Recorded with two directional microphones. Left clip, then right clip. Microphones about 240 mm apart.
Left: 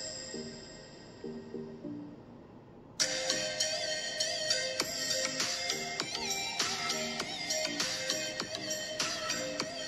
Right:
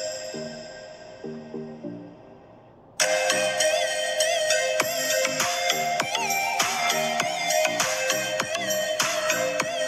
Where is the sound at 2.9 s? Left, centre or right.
Right.